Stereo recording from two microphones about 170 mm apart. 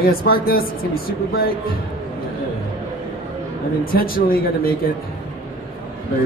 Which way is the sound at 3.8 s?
60° left (ahead or behind).